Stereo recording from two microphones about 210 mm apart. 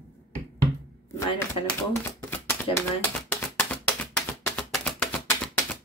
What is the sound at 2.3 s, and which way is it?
Typewriter, 10° left (ahead or behind).